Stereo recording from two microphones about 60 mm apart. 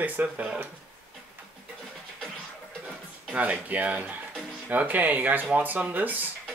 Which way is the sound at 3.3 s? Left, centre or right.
Right.